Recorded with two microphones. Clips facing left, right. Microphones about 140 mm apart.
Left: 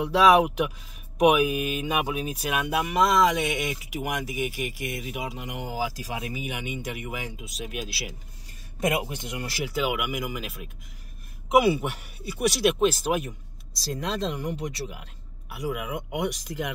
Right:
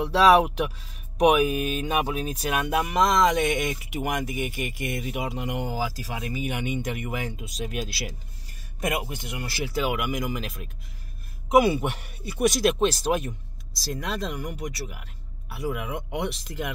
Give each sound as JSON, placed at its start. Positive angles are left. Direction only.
{"t": 0.1, "sound": "speech", "side_deg": 10}
{"t": 8.8, "sound": "speech", "side_deg": 20}
{"t": 9.8, "sound": "speech", "side_deg": 10}
{"t": 14.2, "sound": "speech", "side_deg": 25}
{"t": 15.5, "sound": "speech", "side_deg": 10}